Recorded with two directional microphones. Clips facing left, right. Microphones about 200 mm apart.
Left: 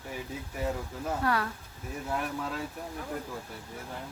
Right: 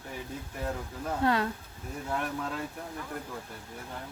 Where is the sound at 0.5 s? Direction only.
5° left (ahead or behind).